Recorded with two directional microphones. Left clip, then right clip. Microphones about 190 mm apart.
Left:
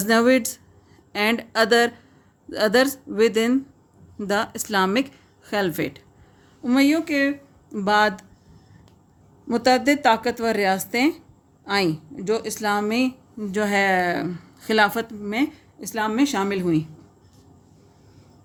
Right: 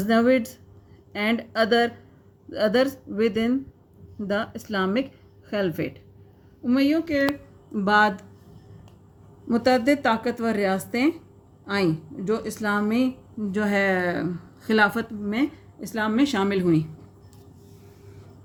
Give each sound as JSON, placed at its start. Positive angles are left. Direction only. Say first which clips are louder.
{"t": 1.2, "sound": "a woman's voice", "louder": "left 3 dB", "side_deg": 55}
{"t": 9.5, "sound": "a woman's voice", "louder": "left 2 dB", "side_deg": 40}